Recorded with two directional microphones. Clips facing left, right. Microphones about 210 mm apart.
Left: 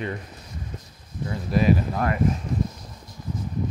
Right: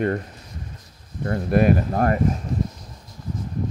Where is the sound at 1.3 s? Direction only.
55° right (ahead or behind).